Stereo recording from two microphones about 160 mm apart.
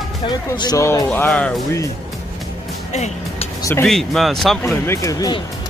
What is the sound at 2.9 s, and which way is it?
Music, 45° left (ahead or behind).